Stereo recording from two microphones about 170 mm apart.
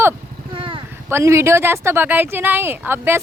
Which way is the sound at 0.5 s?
30° right (ahead or behind).